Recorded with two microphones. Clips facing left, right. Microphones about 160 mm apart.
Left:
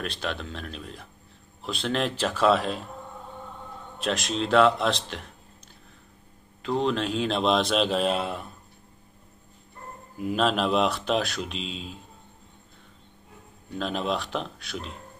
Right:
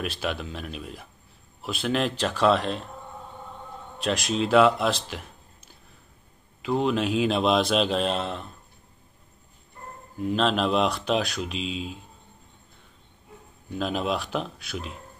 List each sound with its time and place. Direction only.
0.0 s speech: 5° right (ahead or behind)
4.0 s speech: centre (ahead or behind)
6.6 s speech: 5° right (ahead or behind)
10.1 s speech: 5° left (ahead or behind)
13.7 s speech: 5° right (ahead or behind)